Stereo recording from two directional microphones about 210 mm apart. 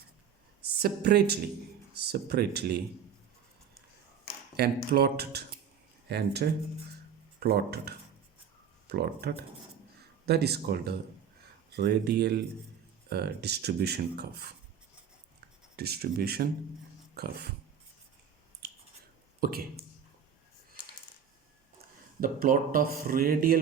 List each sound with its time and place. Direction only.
0.8 s speech: 50° right (ahead or behind)
4.9 s speech: 50° right (ahead or behind)
15.7 s speech: 50° right (ahead or behind)
18.6 s a sound: 50° right (ahead or behind)
19.4 s speech: 45° right (ahead or behind)
22.2 s speech: 40° right (ahead or behind)